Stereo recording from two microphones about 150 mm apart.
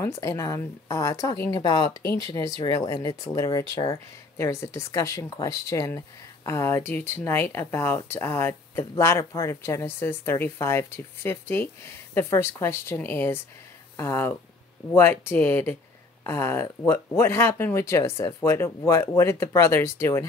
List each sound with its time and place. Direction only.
0.0 s a woman's voice: 20° left (ahead or behind)